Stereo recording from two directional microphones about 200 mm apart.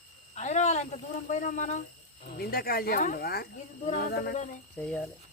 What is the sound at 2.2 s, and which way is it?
Speech, 50° left (ahead or behind).